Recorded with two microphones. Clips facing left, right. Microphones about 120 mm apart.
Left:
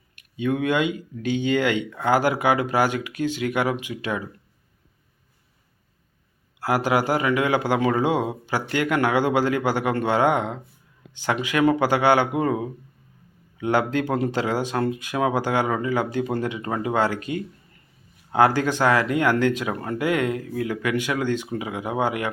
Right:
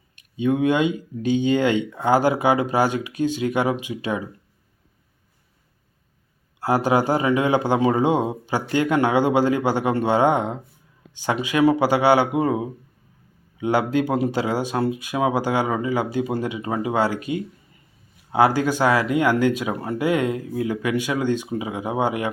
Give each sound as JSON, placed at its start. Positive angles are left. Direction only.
{"t": 0.3, "sound": "a man's voice", "side_deg": -20}
{"t": 6.6, "sound": "a man's voice", "side_deg": -20}